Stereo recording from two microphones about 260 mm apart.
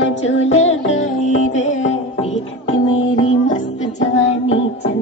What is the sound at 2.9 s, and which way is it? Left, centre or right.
Music, left.